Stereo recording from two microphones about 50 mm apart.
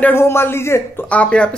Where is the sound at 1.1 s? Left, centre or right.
Left.